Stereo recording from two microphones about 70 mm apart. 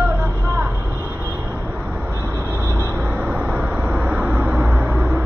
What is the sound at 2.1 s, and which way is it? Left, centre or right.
Vehicle, right.